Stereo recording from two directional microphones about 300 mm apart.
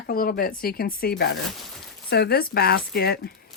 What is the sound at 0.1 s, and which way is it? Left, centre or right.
Speech, left.